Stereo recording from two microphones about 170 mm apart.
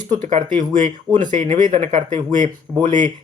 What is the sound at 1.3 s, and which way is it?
Speech, 50° right (ahead or behind).